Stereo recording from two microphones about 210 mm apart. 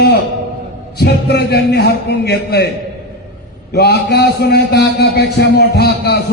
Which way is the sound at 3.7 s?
50° left (ahead or behind).